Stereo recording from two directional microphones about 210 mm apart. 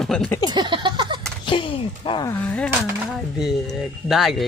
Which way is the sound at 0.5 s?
20° right (ahead or behind).